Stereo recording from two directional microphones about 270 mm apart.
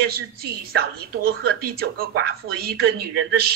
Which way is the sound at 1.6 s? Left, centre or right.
Right.